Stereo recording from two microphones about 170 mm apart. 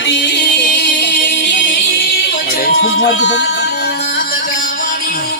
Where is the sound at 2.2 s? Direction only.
60° left (ahead or behind).